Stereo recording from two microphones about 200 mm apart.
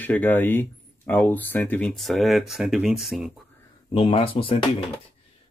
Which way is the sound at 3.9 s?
25° left (ahead or behind).